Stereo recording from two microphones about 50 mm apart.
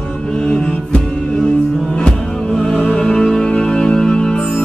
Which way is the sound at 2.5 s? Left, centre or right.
Centre.